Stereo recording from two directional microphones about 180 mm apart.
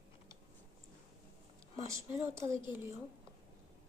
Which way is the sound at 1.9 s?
15° right (ahead or behind).